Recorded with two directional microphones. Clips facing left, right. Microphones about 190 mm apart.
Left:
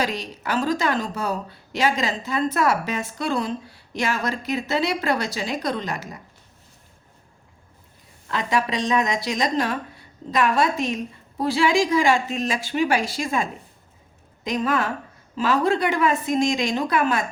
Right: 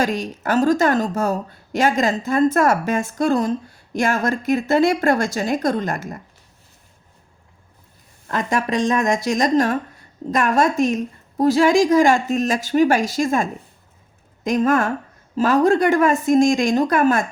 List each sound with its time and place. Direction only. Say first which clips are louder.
0.0 s a woman's voice: right 5 dB; 45° right (ahead or behind)
8.3 s a woman's voice: right 3 dB; 45° right (ahead or behind)